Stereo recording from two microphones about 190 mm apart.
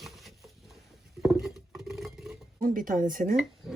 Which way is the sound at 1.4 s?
Centre (ahead or behind).